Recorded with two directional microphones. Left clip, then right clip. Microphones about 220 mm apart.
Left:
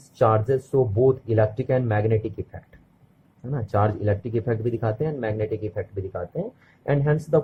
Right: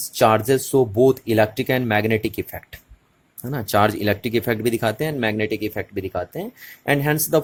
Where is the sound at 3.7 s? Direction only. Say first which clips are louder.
Right 5 dB; 45° right (ahead or behind).